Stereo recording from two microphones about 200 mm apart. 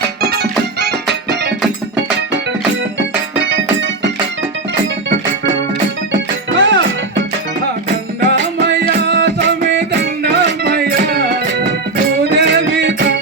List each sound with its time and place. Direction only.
0.3 s music: 55° right (ahead or behind)
3.5 s keyboard: 65° right (ahead or behind)
5.0 s organ: 65° right (ahead or behind)
6.1 s music: 65° right (ahead or behind)
8.3 s music: 60° right (ahead or behind)